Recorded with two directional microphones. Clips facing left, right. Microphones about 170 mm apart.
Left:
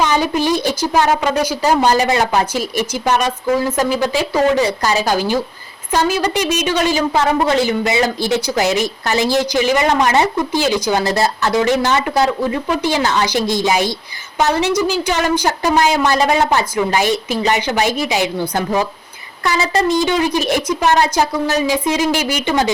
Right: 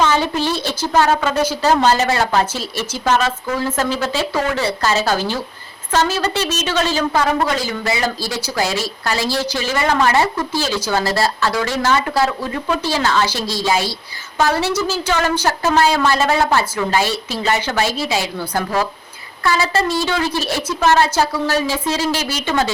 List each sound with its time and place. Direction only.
0.0 s a woman's voice: 15° left (ahead or behind)